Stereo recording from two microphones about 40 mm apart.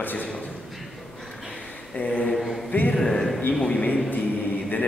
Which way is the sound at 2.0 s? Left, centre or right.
Left.